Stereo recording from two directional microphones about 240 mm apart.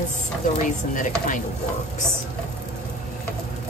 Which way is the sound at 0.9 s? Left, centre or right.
Left.